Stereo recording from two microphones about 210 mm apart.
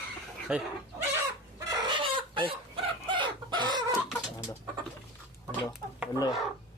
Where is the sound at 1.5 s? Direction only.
20° right (ahead or behind).